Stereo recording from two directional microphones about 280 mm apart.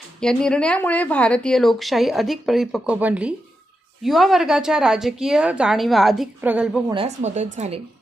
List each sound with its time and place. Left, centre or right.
0.2 s a woman's voice: centre
6.9 s speech: right